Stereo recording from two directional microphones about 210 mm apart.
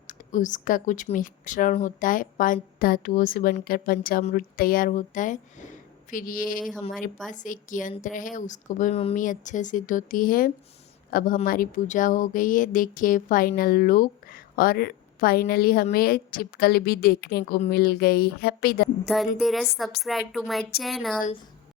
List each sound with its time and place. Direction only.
0.1 s speech: 40° left (ahead or behind)
6.6 s a woman's voice: centre (ahead or behind)
7.3 s speech: 40° left (ahead or behind)
19.0 s a woman's voice: centre (ahead or behind)